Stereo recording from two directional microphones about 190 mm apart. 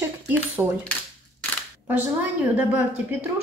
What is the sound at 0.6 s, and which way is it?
Speech, 15° right (ahead or behind).